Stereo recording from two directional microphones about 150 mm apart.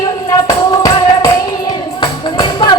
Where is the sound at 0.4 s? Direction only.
25° left (ahead or behind).